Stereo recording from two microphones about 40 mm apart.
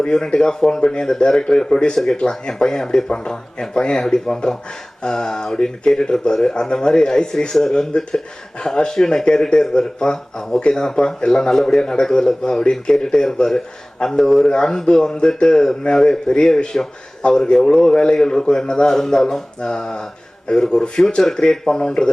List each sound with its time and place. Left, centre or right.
0.0 s speech: left
17.2 s speech: left
17.6 s speech: centre